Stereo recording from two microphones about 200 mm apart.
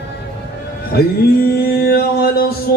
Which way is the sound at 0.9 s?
50° left (ahead or behind).